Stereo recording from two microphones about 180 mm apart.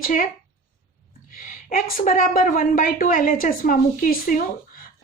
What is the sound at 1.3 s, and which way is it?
A woman's voice, 50° left (ahead or behind).